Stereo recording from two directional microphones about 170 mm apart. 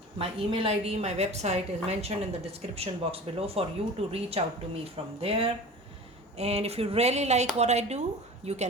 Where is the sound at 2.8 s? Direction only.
35° right (ahead or behind).